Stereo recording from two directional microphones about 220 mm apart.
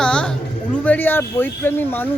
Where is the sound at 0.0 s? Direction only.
5° left (ahead or behind).